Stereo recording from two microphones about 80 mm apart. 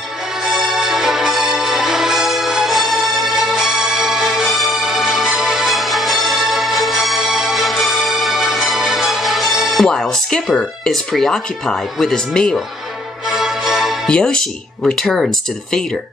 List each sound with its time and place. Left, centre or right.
0.5 s music: centre
9.8 s speech: centre
13.3 s music: centre
14.0 s speech: centre